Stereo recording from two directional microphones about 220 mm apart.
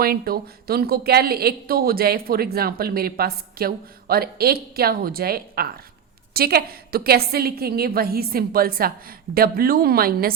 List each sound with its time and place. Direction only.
0.0 s a woman's voice: 40° right (ahead or behind)